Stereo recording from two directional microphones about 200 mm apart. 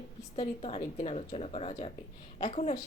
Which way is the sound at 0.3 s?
30° left (ahead or behind).